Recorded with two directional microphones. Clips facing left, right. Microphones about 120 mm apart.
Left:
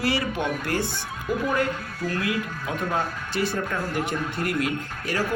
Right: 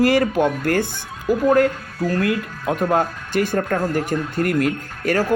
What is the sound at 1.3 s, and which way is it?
Speech, 5° right (ahead or behind).